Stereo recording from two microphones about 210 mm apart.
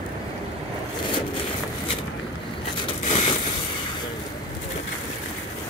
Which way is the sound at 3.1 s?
30° left (ahead or behind).